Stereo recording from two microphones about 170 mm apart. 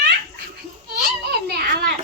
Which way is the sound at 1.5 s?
70° right (ahead or behind).